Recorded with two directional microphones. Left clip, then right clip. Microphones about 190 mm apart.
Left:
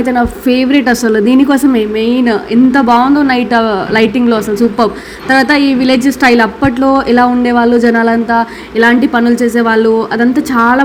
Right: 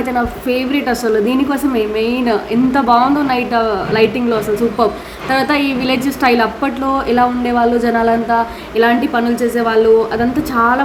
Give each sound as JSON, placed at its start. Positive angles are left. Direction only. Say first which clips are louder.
{"t": 0.0, "sound": "a woman's voice", "louder": "left 5 dB", "side_deg": 20}